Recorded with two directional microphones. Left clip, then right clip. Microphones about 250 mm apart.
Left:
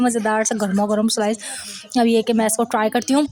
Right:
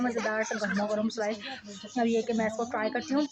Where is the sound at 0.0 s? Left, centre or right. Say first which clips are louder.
Left 10 dB; left.